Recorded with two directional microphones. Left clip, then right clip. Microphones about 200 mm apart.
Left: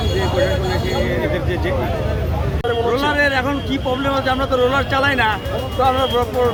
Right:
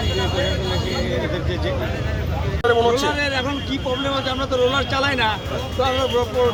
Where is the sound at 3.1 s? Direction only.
5° left (ahead or behind).